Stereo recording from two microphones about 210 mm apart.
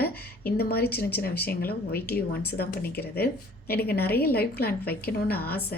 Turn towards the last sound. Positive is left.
turn(degrees=45)  # may be behind; listen again after turning